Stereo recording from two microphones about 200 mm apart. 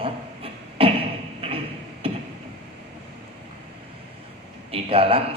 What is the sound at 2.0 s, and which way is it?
Chop, 30° right (ahead or behind).